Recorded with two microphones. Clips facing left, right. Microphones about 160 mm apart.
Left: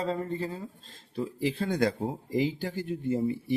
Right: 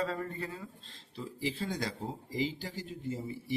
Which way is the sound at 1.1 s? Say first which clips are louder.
Left 7 dB; 60° left (ahead or behind).